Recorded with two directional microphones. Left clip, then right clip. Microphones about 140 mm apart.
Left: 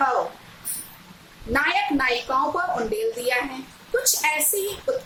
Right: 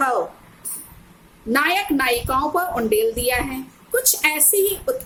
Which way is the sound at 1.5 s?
35° right (ahead or behind).